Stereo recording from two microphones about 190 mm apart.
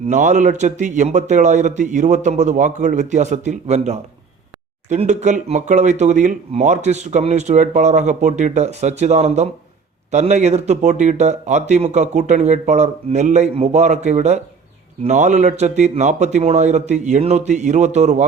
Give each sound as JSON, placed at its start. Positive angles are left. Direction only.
{"t": 0.1, "sound": "speech", "side_deg": -40}